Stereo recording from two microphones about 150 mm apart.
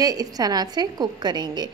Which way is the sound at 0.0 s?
25° right (ahead or behind).